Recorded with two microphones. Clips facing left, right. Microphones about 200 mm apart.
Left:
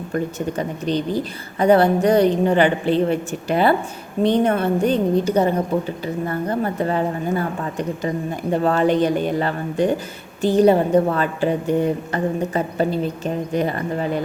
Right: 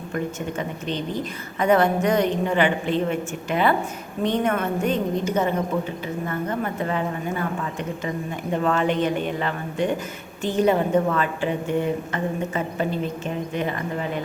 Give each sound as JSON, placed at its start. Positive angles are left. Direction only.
{"t": 0.1, "sound": "a woman's voice", "side_deg": 35}